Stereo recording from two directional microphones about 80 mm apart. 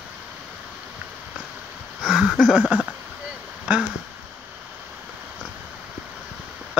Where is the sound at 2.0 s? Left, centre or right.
Centre.